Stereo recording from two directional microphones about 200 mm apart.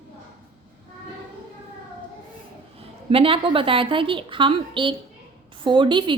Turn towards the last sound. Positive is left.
turn(degrees=-25)  # may be behind; listen again after turning